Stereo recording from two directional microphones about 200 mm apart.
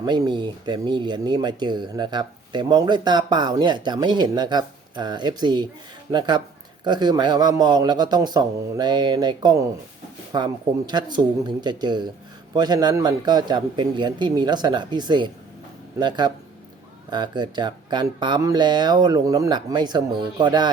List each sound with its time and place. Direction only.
0.0 s speech: 20° right (ahead or behind)